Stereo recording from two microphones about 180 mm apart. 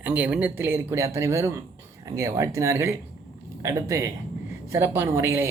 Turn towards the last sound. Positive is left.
turn(degrees=-15)  # may be behind; listen again after turning